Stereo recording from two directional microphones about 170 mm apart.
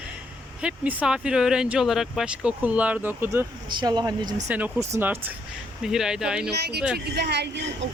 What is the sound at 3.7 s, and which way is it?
Speech, 25° right (ahead or behind).